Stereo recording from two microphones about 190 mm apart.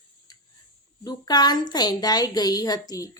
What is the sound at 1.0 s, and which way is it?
A woman's voice, 20° left (ahead or behind).